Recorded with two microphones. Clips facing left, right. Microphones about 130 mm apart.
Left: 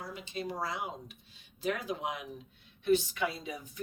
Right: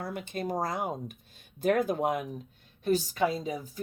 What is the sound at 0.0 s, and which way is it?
A woman's voice, 55° right (ahead or behind).